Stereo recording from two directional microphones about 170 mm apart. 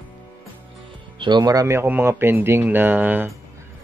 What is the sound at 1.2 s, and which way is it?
Speech, 25° right (ahead or behind).